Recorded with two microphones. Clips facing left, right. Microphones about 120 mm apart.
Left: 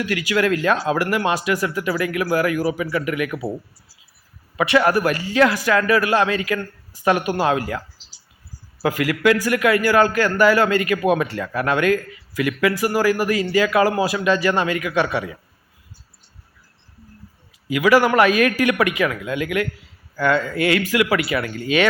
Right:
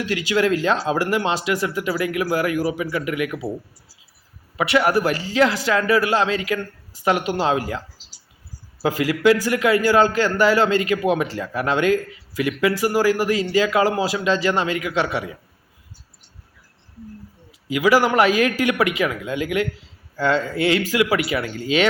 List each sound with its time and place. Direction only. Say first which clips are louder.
0.0 s speech: even; 25° right (ahead or behind)
4.5 s speech: left 1 dB; 15° right (ahead or behind)
17.7 s speech: left 1 dB; 20° right (ahead or behind)